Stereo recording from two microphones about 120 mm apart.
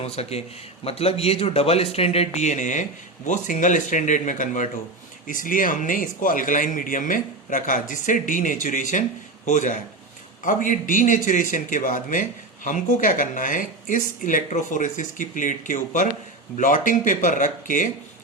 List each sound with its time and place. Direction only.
0.0 s speech: 60° left (ahead or behind); by 17.8 s 90° left